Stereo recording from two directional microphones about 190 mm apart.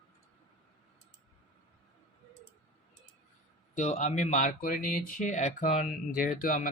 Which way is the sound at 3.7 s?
40° left (ahead or behind).